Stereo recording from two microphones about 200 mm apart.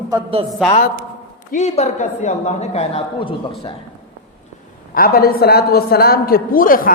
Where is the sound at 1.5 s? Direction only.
35° left (ahead or behind).